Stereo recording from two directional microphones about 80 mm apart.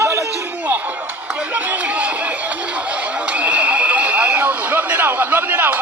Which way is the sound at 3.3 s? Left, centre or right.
Centre.